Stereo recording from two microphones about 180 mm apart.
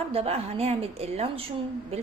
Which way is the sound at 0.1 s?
35° right (ahead or behind).